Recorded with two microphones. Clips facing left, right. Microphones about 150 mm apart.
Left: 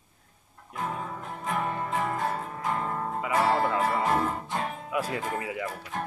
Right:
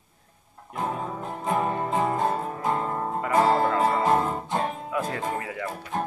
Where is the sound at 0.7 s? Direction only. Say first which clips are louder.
Right 4 dB; 30° right (ahead or behind).